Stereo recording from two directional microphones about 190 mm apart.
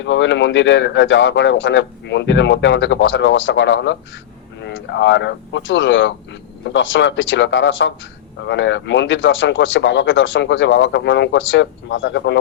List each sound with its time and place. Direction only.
0.0 s speech: 70° left (ahead or behind)